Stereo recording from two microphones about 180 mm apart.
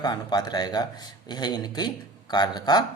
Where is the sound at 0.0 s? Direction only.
20° left (ahead or behind).